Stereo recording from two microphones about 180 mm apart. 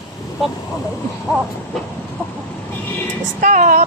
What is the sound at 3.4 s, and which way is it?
Music, 45° right (ahead or behind).